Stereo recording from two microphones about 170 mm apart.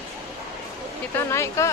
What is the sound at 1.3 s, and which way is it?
Speech, 15° left (ahead or behind).